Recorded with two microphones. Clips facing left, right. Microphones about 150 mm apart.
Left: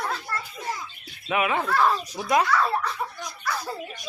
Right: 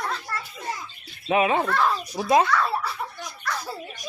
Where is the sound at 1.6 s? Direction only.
Centre (ahead or behind).